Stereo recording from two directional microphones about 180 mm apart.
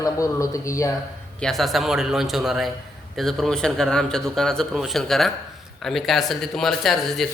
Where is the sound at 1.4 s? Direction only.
Centre (ahead or behind).